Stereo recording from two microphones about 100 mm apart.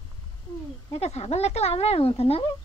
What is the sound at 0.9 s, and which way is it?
A woman's voice, 90° left.